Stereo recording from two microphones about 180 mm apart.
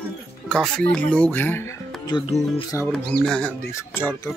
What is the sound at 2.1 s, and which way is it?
Speech, 30° left (ahead or behind).